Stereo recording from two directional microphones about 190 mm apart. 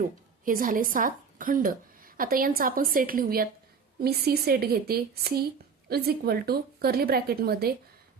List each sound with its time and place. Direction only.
0.0 s a woman's voice: 45° right (ahead or behind)